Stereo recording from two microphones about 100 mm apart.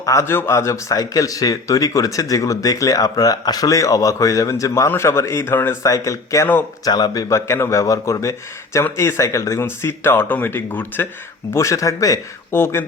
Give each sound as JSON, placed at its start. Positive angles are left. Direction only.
{"t": 0.0, "sound": "a man's voice", "side_deg": 30}
{"t": 5.8, "sound": "a man's voice", "side_deg": 35}
{"t": 11.5, "sound": "speech", "side_deg": 30}
{"t": 12.5, "sound": "a man's voice", "side_deg": 25}